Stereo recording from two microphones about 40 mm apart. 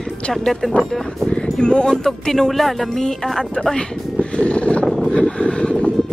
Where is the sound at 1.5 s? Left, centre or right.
Left.